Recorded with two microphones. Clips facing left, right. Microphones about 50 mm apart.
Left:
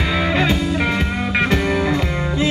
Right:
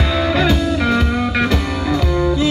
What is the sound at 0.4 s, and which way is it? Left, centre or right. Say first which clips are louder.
Music: right 2 dB; left.